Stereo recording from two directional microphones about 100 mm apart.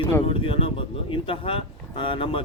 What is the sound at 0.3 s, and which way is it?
Speech, 65° left (ahead or behind).